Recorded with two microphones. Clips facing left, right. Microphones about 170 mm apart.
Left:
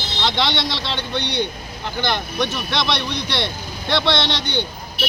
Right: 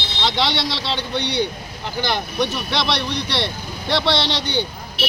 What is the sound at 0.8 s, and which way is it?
Speech, 35° right (ahead or behind).